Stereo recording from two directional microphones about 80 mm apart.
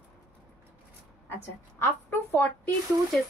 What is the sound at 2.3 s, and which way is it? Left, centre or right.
Speech, left.